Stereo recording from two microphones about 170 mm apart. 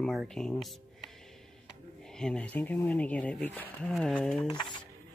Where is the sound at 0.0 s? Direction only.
Centre (ahead or behind).